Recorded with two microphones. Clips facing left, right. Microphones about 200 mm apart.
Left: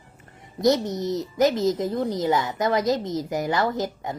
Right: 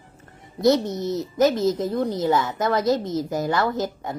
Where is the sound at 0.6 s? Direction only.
20° left (ahead or behind).